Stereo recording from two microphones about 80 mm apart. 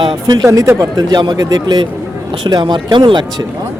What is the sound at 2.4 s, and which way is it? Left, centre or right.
Speech, right.